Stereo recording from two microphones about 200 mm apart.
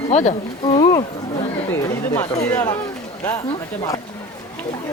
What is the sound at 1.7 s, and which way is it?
A woman's voice, 15° left (ahead or behind).